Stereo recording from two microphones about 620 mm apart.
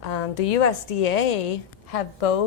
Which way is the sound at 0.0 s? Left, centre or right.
Left.